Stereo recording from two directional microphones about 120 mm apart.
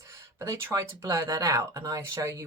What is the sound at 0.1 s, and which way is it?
Speech, 25° right (ahead or behind).